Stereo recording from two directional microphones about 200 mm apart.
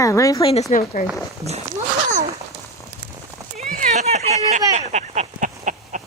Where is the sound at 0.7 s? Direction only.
40° left (ahead or behind).